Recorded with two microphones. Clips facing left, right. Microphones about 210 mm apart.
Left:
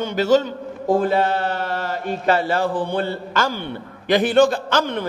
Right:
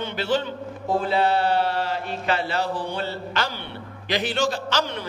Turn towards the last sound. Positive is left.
turn(degrees=55)  # may be behind; listen again after turning